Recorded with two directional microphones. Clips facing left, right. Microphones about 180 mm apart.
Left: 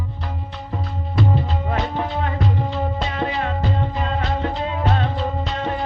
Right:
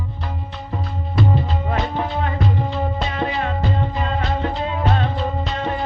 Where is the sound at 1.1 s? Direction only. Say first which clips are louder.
Right 1 dB; 40° left (ahead or behind).